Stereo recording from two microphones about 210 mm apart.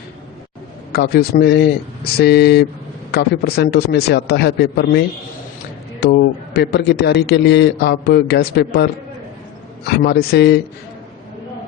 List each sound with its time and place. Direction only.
0.9 s a man's voice: 50° left (ahead or behind)